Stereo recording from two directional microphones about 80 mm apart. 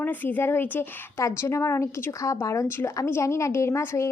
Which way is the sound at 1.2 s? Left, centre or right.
Left.